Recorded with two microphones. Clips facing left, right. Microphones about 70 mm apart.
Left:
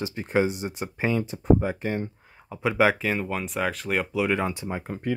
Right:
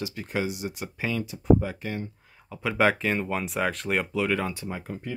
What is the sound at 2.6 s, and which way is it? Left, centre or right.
Speech, centre.